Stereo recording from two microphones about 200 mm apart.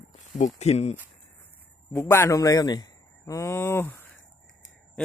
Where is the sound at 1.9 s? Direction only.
15° left (ahead or behind).